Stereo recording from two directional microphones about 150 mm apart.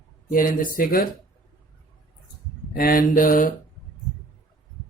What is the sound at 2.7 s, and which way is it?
Speech, 75° left (ahead or behind).